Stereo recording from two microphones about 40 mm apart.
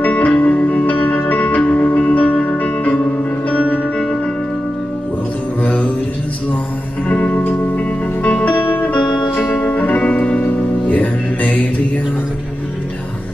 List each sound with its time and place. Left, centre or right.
0.0 s music: left
5.6 s music: left
7.1 s music: left
8.2 s music: left
8.9 s music: centre
9.5 s music: left